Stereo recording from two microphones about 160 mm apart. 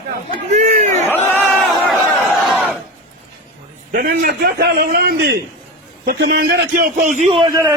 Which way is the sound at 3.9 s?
60° right (ahead or behind).